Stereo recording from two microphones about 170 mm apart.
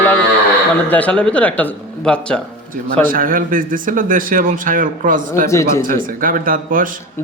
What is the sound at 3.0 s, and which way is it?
Speech, 55° right (ahead or behind).